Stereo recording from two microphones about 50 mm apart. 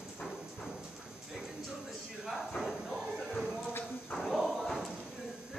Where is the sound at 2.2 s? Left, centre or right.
Centre.